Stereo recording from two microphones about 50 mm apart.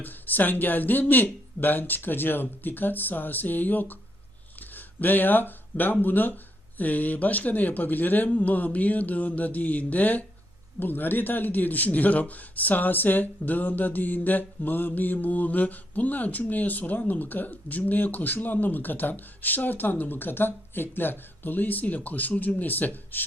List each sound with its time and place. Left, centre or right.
0.0 s a man's voice: left